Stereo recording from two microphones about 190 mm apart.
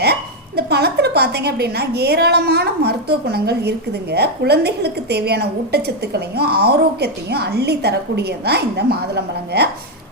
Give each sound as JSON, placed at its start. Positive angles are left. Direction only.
{"t": 0.0, "sound": "a woman's voice", "side_deg": -60}